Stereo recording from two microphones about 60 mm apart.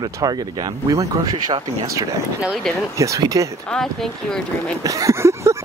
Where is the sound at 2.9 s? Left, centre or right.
Right.